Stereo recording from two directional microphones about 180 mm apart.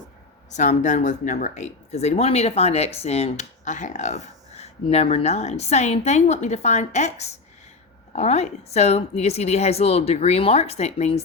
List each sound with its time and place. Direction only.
0.5 s speech: 40° left (ahead or behind)